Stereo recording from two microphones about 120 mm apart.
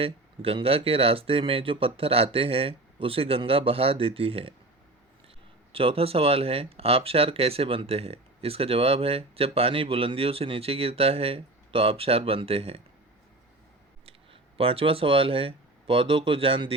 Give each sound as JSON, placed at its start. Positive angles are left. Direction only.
{"t": 0.0, "sound": "speech", "side_deg": -50}
{"t": 5.7, "sound": "speech", "side_deg": -50}
{"t": 14.6, "sound": "speech", "side_deg": -50}